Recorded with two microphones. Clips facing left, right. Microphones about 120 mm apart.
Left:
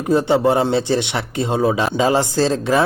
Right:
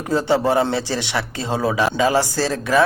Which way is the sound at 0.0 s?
20° left (ahead or behind).